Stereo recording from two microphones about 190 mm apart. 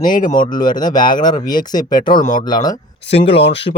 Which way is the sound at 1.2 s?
20° left (ahead or behind).